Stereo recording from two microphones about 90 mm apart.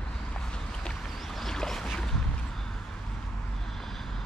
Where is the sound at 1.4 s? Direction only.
5° left (ahead or behind).